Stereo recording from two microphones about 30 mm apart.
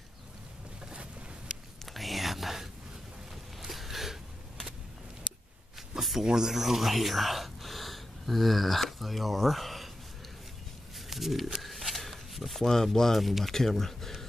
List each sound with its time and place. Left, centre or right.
1.9 s whispering: centre
3.5 s a sound: centre
6.2 s speech: right
6.5 s speech: centre
11.0 s a sound: centre
13.2 s speech: centre
13.5 s speech: centre